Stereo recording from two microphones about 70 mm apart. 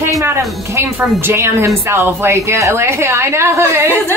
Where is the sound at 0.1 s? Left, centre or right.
Right.